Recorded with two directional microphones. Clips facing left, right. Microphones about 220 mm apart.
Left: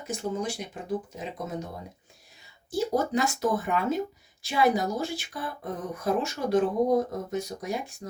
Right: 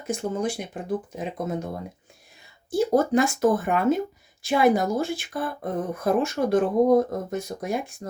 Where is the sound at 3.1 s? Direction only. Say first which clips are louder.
Right 6 dB; 55° right (ahead or behind).